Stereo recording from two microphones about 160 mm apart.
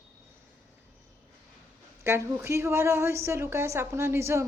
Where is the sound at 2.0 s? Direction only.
15° right (ahead or behind).